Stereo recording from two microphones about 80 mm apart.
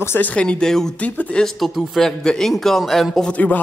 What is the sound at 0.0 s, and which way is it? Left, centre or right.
Speech, left.